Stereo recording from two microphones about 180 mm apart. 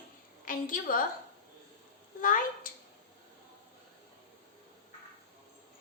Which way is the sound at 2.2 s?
50° left (ahead or behind).